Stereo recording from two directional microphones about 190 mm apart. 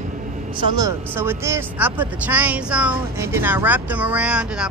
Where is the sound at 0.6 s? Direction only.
20° right (ahead or behind).